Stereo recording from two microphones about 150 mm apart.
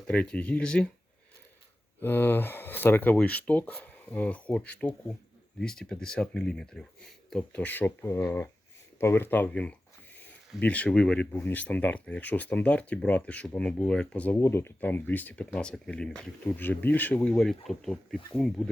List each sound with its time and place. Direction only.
0.1 s speech: 10° left (ahead or behind)
2.0 s speech: 15° left (ahead or behind)